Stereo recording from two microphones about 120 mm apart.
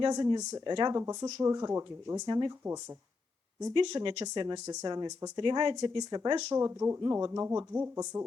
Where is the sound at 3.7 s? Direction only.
40° right (ahead or behind).